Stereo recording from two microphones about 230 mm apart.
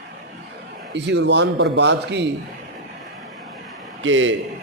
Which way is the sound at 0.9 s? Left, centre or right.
Right.